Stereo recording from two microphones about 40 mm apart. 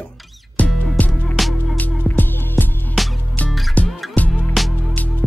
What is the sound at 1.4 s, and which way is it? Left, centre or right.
Music, centre.